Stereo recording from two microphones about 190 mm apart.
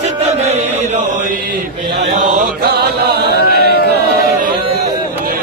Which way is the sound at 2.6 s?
55° right (ahead or behind).